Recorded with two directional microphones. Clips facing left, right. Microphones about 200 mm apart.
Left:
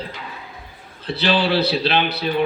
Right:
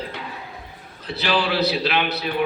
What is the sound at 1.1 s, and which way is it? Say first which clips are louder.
A man's voice: left 3 dB; 30° left (ahead or behind).